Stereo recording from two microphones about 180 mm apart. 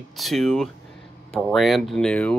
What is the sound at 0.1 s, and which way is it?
Speech, centre (ahead or behind).